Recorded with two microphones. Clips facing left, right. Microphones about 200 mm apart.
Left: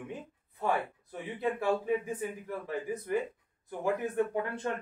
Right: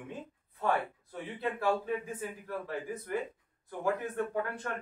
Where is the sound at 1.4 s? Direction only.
15° left (ahead or behind).